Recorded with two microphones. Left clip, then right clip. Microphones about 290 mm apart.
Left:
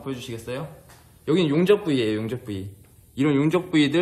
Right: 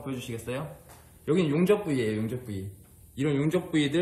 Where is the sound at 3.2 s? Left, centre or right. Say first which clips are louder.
Left 6 dB; left.